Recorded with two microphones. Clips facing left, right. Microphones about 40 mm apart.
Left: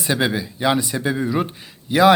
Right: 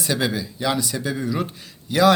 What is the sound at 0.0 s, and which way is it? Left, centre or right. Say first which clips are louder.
Speech: left 3 dB; left.